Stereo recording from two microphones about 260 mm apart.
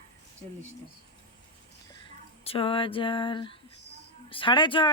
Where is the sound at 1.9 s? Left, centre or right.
Centre.